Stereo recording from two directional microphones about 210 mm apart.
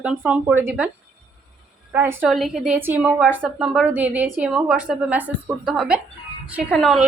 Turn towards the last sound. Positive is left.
turn(degrees=0)  # may be behind; listen again after turning